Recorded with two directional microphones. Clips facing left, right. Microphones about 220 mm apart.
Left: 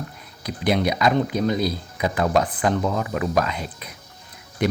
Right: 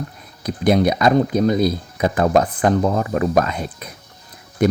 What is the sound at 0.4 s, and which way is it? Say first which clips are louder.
Speech: right 5 dB; 45° right (ahead or behind).